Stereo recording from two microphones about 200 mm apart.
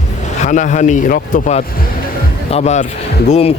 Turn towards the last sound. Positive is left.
turn(degrees=30)  # may be behind; listen again after turning